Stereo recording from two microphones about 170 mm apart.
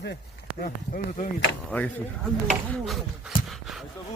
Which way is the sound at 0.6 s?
55° left (ahead or behind).